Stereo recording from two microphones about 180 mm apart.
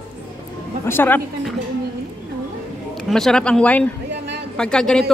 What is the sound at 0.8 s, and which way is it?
Speech, 10° left (ahead or behind).